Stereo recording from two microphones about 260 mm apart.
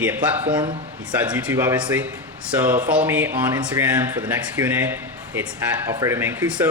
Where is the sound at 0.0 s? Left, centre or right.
Centre.